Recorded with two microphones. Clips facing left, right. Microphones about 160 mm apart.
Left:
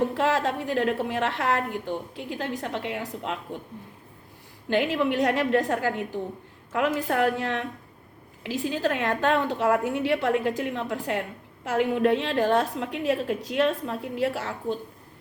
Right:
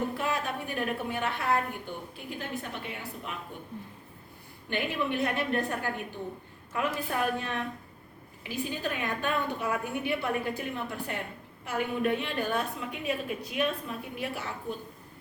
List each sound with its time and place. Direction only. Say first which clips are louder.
0.1 s a woman's voice: left 7 dB; 90° left
4.7 s a woman's voice: left 7 dB; 90° left